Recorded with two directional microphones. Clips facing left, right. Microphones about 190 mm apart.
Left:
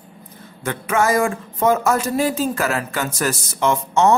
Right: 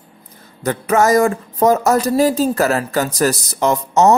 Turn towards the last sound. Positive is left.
turn(degrees=-40)  # may be behind; listen again after turning